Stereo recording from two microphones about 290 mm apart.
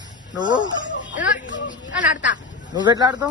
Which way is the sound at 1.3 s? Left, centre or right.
Left.